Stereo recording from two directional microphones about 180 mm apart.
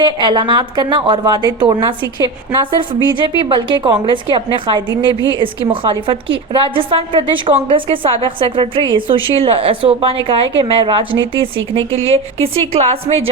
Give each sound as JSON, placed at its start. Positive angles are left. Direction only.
{"t": 0.0, "sound": "a woman's voice", "side_deg": -25}